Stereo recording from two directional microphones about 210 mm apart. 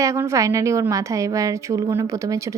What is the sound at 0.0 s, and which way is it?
A woman's voice, 15° right (ahead or behind).